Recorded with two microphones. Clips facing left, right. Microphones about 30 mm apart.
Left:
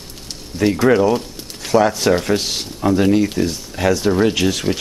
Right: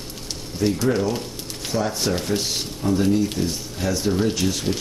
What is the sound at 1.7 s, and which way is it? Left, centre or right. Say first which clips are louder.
Speech: left 9 dB; left.